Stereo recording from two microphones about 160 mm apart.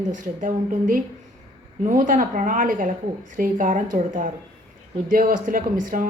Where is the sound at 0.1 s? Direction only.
55° right (ahead or behind).